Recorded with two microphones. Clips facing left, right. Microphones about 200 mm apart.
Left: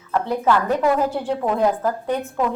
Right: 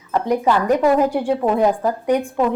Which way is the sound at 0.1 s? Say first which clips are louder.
Right 2 dB; 15° right (ahead or behind).